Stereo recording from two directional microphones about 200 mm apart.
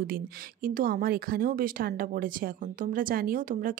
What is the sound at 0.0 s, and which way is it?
Speech, 45° right (ahead or behind).